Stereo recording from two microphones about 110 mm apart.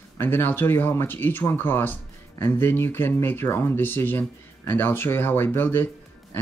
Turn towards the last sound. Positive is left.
turn(degrees=20)  # may be behind; listen again after turning